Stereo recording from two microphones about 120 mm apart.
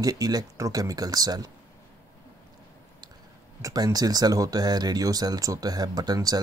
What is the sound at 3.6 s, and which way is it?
Speech, 30° right (ahead or behind).